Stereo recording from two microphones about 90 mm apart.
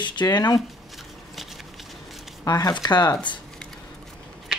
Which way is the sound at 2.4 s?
50° left (ahead or behind).